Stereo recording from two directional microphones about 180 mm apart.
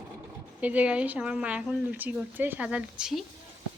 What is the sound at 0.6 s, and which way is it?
Speech, 10° right (ahead or behind).